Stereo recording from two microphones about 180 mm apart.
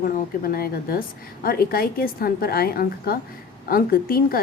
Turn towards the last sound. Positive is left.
turn(degrees=55)  # may be behind; listen again after turning